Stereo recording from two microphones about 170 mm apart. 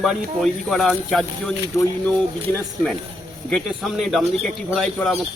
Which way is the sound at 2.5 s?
15° left (ahead or behind).